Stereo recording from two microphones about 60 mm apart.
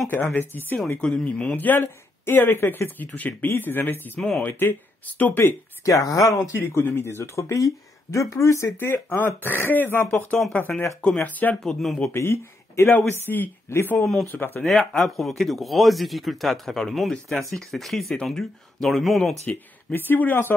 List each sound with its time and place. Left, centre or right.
0.1 s speech: left
0.9 s speech: centre
1.6 s speech: left
5.9 s speech: left
6.5 s speech: left
8.7 s speech: left
10.3 s speech: centre
11.2 s speech: left
11.6 s speech: centre
12.1 s speech: left
14.6 s speech: centre
19.4 s speech: left